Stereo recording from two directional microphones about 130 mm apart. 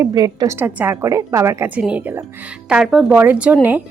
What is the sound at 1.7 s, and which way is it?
A woman's voice, 10° right (ahead or behind).